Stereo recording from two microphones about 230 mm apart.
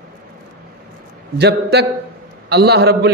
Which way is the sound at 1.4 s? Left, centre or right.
Right.